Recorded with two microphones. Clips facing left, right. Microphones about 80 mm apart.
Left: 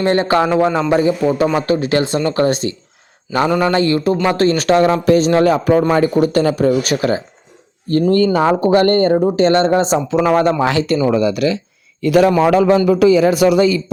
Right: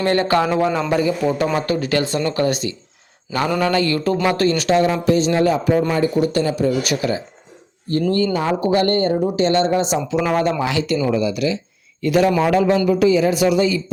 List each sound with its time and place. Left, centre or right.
0.0 s a man's voice: left
4.3 s speech: left
4.7 s speech: left
11.1 s speech: left
12.0 s a man's voice: left